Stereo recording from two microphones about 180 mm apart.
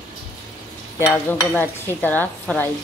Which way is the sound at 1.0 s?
10° left (ahead or behind).